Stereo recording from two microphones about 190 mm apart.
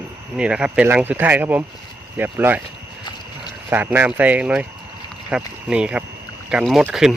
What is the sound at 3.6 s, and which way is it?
Speech, 10° right (ahead or behind).